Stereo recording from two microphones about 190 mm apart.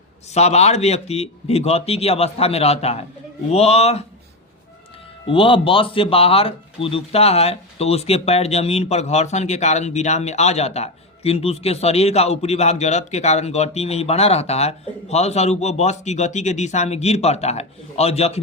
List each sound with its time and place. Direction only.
0.3 s speech: 35° left (ahead or behind)
5.3 s speech: 25° left (ahead or behind)